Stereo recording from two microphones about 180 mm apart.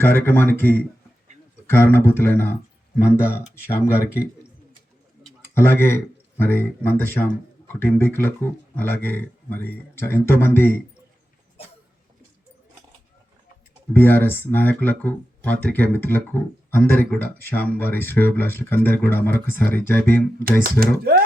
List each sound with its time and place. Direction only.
0.0 s speech: 10° left (ahead or behind)
5.5 s speech: 15° left (ahead or behind)
13.9 s speech: 10° left (ahead or behind)
20.7 s speech: 55° right (ahead or behind)